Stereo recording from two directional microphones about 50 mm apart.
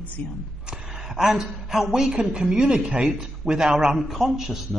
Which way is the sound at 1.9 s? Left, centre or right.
Centre.